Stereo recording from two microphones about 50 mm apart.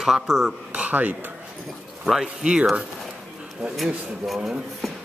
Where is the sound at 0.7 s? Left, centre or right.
Right.